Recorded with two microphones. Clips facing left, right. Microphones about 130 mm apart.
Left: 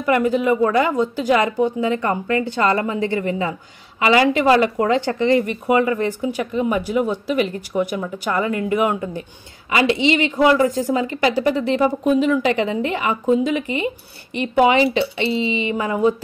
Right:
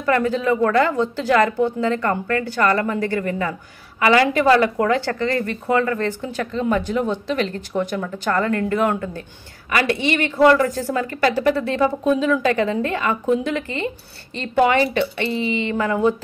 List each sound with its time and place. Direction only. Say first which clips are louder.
0.0 s speech: left 2 dB; 10° left (ahead or behind)